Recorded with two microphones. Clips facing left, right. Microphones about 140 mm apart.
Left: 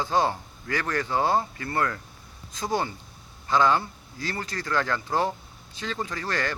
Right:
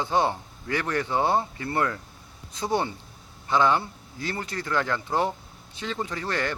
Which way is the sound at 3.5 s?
20° right (ahead or behind).